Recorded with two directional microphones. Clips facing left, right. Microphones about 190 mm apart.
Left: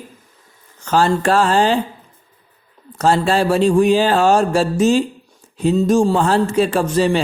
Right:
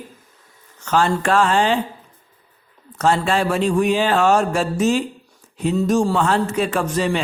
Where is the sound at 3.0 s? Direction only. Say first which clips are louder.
Left 3 dB; 35° left (ahead or behind).